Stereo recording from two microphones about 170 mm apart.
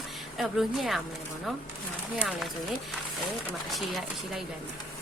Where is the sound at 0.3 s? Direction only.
Centre (ahead or behind).